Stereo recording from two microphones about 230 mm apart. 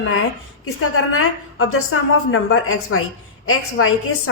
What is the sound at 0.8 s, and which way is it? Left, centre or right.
A woman's voice, left.